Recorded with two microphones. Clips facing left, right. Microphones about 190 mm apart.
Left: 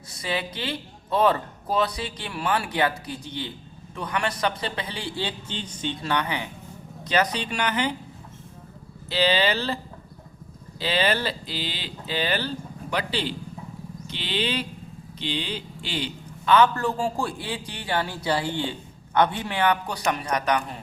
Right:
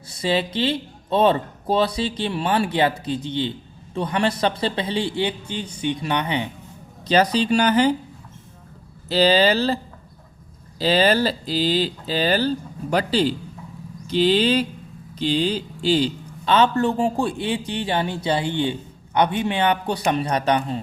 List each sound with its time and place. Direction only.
0.2 s a man's voice: 25° right (ahead or behind)
9.0 s speech: 40° right (ahead or behind)
10.8 s a man's voice: 40° right (ahead or behind)